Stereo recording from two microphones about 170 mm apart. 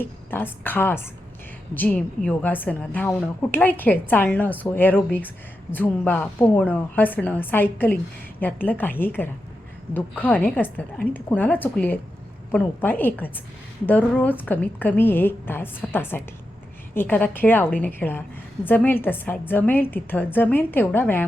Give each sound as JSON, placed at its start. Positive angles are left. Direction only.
{"t": 0.0, "sound": "a woman's voice", "side_deg": 10}